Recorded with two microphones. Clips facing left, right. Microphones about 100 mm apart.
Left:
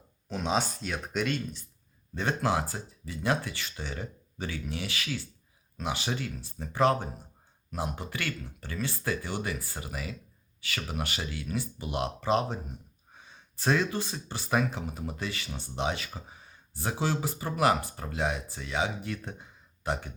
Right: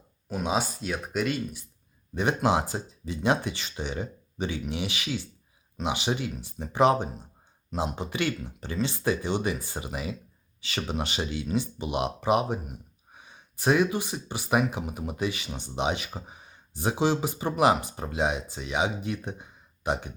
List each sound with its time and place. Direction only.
0.3 s speech: 10° right (ahead or behind)